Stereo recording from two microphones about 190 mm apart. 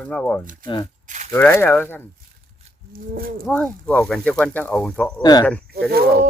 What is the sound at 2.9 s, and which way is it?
Speech, 50° right (ahead or behind).